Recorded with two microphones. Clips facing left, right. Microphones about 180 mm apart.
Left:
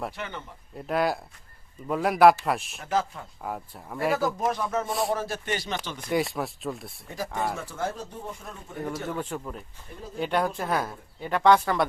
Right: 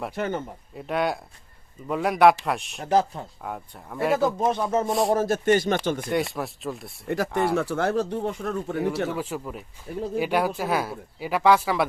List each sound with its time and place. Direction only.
0.2 s speech: 45° right (ahead or behind)
0.8 s speech: centre (ahead or behind)
2.8 s speech: 40° right (ahead or behind)
3.4 s speech: centre (ahead or behind)
4.4 s speech: 25° right (ahead or behind)
4.9 s speech: centre (ahead or behind)
5.1 s speech: 45° right (ahead or behind)
6.1 s speech: centre (ahead or behind)
7.5 s speech: 70° right (ahead or behind)
9.0 s speech: 5° right (ahead or behind)